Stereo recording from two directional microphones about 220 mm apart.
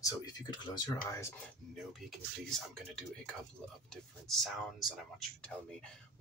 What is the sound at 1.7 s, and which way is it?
Speech, centre (ahead or behind).